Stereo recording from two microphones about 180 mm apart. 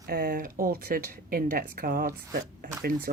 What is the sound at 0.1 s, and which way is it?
Speech, 55° right (ahead or behind).